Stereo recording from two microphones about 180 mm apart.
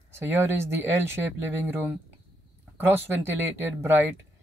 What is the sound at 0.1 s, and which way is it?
Speech, 10° right (ahead or behind).